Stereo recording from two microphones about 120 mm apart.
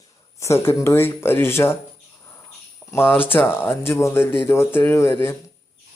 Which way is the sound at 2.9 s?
20° left (ahead or behind).